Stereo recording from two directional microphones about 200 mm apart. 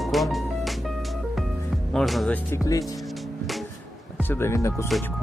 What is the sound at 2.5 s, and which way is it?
Speech, 15° left (ahead or behind).